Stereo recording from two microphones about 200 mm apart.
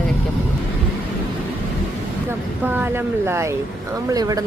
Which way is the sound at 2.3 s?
10° right (ahead or behind).